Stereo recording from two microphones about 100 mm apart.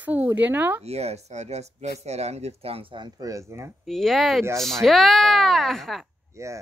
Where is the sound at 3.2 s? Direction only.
35° right (ahead or behind).